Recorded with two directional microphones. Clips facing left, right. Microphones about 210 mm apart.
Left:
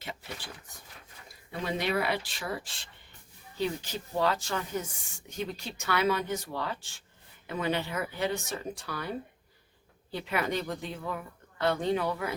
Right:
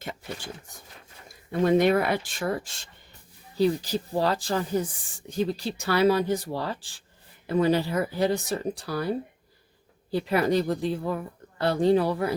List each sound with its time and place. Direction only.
0.0 s speech: 45° right (ahead or behind)